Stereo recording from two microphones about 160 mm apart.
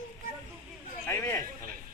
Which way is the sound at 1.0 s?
15° left (ahead or behind).